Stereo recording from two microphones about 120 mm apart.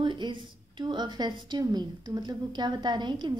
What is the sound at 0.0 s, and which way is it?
A woman's voice, 40° right (ahead or behind).